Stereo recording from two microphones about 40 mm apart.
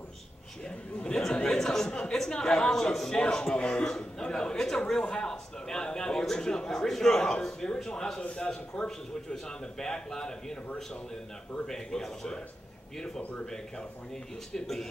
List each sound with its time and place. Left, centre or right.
1.0 s chatter: left
1.6 s a sound: centre
1.9 s a sound: left
2.3 s a man's voice: centre
3.6 s a sound: left
8.2 s a man's voice: left
8.5 s a man's voice: centre
11.6 s a man's voice: centre
13.2 s a man's voice: left
14.5 s a man's voice: centre